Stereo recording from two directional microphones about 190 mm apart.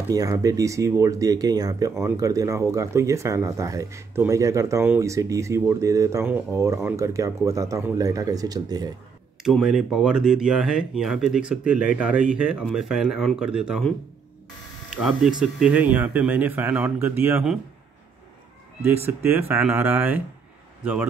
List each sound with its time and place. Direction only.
0.1 s speech: 20° right (ahead or behind)
9.4 s speech: centre (ahead or behind)
15.0 s speech: 5° right (ahead or behind)
19.2 s speech: 10° right (ahead or behind)